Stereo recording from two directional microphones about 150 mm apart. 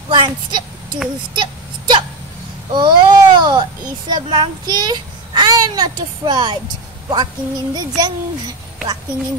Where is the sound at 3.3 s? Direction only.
30° right (ahead or behind).